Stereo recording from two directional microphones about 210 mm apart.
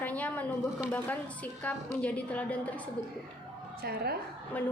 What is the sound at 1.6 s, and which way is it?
A woman's voice, 5° left (ahead or behind).